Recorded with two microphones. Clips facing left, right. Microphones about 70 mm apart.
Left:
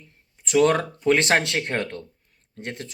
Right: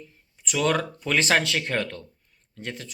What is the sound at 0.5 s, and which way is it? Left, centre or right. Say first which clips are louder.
Speech: left 5 dB; left.